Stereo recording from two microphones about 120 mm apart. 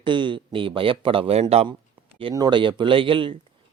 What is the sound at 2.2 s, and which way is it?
A man's voice, 40° right (ahead or behind).